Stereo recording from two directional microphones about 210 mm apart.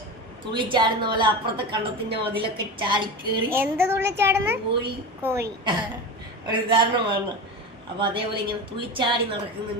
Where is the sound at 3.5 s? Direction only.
10° right (ahead or behind).